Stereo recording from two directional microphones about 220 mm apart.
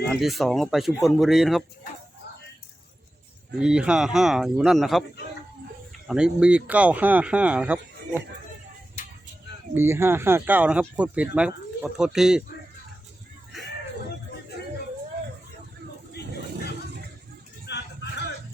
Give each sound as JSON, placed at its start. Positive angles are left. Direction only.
{"t": 0.1, "sound": "speech", "side_deg": 0}
{"t": 3.6, "sound": "speech", "side_deg": -5}
{"t": 6.1, "sound": "speech", "side_deg": -5}
{"t": 9.7, "sound": "speech", "side_deg": -10}
{"t": 17.7, "sound": "vehicle", "side_deg": 50}